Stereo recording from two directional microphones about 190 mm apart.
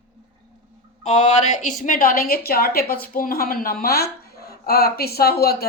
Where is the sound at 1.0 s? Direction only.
40° left (ahead or behind).